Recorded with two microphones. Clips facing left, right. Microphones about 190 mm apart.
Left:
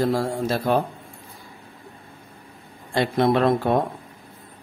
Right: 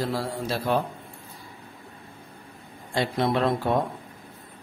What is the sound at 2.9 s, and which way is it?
Speech, 60° left (ahead or behind).